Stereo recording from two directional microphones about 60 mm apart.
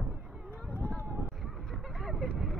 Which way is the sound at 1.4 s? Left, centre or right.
Centre.